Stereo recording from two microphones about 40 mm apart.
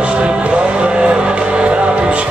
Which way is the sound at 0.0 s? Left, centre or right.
Right.